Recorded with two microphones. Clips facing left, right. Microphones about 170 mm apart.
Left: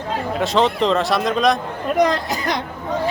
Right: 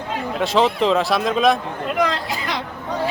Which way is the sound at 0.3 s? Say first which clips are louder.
Even; centre (ahead or behind).